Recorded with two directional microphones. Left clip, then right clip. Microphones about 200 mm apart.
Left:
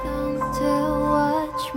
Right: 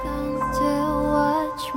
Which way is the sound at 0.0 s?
Centre (ahead or behind).